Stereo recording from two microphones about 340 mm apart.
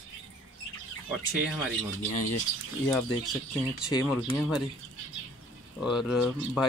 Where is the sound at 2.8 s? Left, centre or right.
Centre.